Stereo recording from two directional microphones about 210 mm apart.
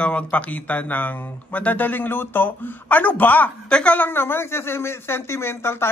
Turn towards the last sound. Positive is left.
turn(degrees=10)  # may be behind; listen again after turning